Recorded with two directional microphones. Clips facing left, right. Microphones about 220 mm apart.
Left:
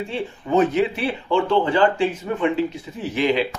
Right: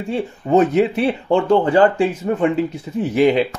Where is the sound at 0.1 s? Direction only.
40° right (ahead or behind).